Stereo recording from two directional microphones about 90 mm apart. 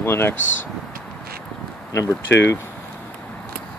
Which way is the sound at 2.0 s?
35° left (ahead or behind).